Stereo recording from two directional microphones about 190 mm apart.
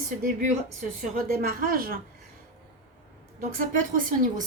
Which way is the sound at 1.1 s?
50° right (ahead or behind).